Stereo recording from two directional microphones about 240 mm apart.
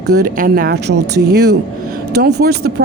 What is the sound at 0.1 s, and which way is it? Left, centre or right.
Speech, right.